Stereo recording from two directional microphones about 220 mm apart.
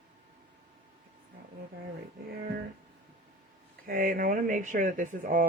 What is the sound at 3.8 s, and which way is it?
Speech, 40° right (ahead or behind).